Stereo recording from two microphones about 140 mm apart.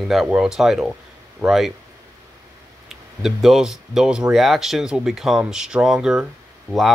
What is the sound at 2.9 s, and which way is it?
Speech, centre (ahead or behind).